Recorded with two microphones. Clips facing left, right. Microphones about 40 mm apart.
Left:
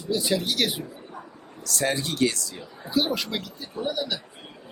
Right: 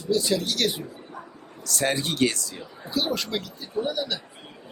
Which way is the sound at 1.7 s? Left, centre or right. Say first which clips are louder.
Right 1 dB; right.